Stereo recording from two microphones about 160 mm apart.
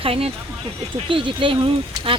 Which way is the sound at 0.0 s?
35° right (ahead or behind).